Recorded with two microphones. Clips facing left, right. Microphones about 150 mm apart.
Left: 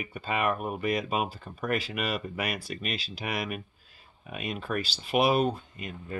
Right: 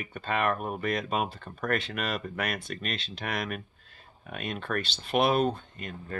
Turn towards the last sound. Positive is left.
turn(degrees=5)  # may be behind; listen again after turning